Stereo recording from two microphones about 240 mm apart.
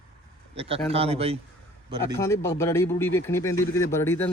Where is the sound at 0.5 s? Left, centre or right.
Right.